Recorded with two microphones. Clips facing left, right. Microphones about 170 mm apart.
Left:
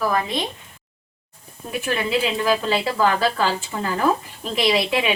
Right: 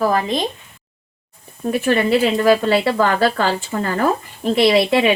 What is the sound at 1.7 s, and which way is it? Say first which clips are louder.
Speech: right 7 dB; 45° right (ahead or behind).